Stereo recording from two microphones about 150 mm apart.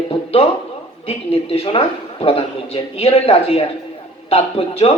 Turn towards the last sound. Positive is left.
turn(degrees=40)  # may be behind; listen again after turning